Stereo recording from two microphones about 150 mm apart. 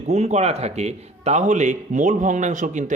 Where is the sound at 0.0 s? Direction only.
50° right (ahead or behind).